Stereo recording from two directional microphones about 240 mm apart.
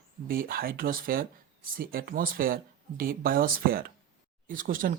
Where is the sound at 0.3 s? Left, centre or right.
Right.